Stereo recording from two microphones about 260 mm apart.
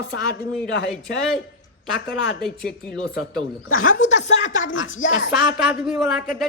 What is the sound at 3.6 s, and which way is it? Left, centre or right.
Speech, left.